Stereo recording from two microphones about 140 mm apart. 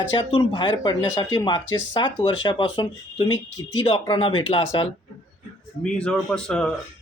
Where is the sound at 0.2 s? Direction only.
35° left (ahead or behind).